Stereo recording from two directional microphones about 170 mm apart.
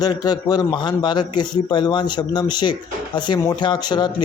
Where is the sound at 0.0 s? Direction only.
25° left (ahead or behind).